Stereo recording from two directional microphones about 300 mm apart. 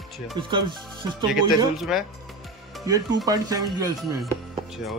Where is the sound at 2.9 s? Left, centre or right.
Centre.